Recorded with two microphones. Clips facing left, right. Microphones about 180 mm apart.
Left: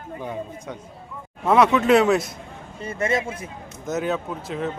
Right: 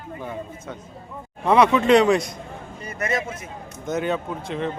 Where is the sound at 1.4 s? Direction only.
Centre (ahead or behind).